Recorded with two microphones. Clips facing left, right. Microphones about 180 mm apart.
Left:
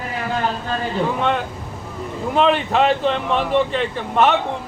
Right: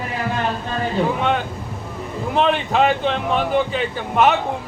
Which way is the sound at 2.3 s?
Centre (ahead or behind).